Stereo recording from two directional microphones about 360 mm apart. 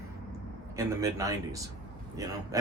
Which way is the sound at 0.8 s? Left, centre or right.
Centre.